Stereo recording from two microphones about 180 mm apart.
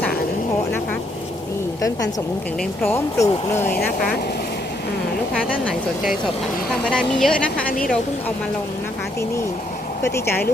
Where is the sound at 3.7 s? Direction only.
55° left (ahead or behind).